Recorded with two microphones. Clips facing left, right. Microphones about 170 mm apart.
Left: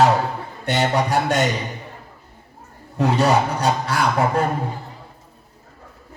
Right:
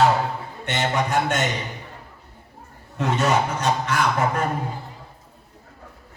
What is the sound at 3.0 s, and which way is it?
Speech, 35° left (ahead or behind).